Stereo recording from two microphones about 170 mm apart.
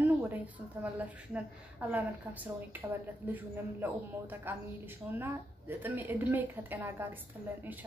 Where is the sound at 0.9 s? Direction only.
10° right (ahead or behind).